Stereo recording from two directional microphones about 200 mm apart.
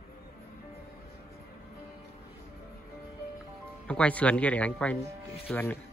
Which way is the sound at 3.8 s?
5° left (ahead or behind).